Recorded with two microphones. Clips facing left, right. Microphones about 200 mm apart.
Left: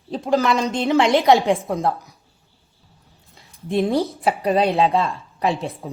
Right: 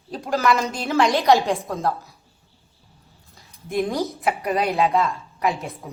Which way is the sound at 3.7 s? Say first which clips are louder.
Left 4 dB; 30° left (ahead or behind).